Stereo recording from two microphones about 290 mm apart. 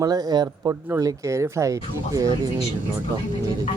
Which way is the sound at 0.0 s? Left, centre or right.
Centre.